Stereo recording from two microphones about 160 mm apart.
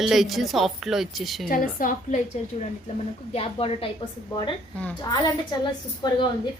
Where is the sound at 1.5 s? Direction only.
60° left (ahead or behind).